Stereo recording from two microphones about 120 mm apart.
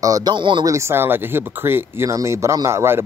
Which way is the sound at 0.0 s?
30° right (ahead or behind).